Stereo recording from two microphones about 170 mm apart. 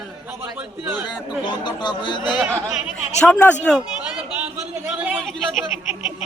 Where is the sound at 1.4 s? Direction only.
25° left (ahead or behind).